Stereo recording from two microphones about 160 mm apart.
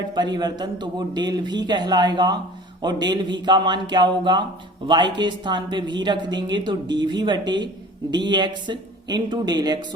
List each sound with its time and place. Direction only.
0.1 s speech: 25° right (ahead or behind)